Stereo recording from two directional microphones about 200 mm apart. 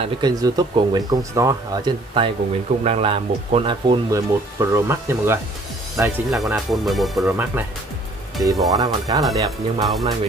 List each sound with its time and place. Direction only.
0.0 s speech: 20° right (ahead or behind)